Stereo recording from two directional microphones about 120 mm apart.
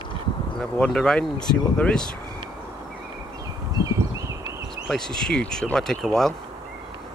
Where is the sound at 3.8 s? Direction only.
25° right (ahead or behind).